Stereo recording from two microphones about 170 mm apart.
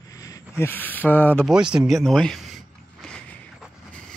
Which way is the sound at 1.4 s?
5° right (ahead or behind).